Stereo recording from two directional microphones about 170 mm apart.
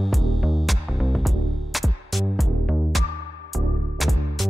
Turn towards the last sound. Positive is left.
turn(degrees=0)  # may be behind; listen again after turning